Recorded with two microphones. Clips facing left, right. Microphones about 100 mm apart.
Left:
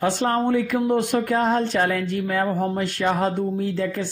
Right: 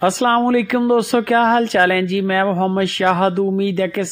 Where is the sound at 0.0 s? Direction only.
90° right.